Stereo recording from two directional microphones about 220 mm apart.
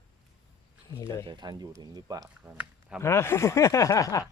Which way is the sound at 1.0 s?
15° left (ahead or behind).